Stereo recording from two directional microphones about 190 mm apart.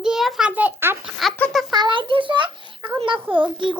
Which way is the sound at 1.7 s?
25° right (ahead or behind).